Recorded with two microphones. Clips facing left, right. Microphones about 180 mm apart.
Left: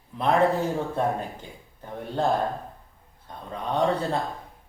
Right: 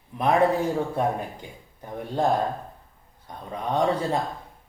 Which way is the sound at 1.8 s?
15° right (ahead or behind).